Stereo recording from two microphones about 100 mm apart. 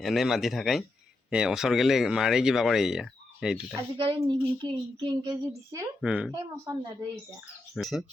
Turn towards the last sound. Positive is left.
turn(degrees=0)  # may be behind; listen again after turning